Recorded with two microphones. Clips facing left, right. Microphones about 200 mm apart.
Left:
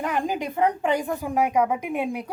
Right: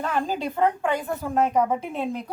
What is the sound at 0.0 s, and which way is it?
A woman's voice, 15° left (ahead or behind).